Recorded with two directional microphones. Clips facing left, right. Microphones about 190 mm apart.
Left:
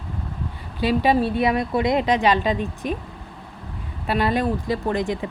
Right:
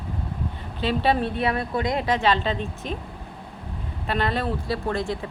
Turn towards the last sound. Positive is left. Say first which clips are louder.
# left 3 dB
turn(degrees=15)  # may be behind; listen again after turning